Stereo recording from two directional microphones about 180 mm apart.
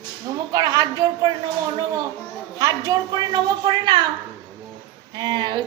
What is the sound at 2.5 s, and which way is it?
A woman's voice, 20° right (ahead or behind).